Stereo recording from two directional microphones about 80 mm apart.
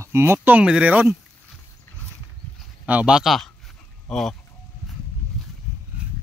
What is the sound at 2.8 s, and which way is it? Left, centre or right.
Speech, centre.